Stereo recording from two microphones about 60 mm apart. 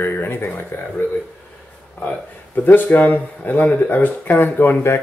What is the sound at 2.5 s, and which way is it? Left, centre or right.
Speech, left.